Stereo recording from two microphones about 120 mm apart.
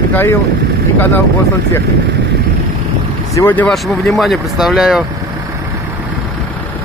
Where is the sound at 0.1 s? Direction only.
20° left (ahead or behind).